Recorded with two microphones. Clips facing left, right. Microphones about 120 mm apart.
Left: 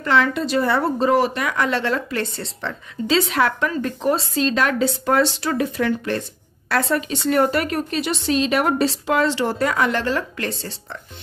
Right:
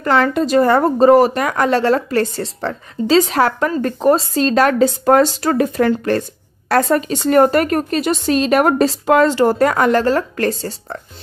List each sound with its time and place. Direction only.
0.0 s a woman's voice: 45° right (ahead or behind)